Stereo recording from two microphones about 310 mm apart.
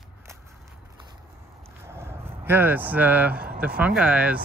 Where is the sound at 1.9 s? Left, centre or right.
Centre.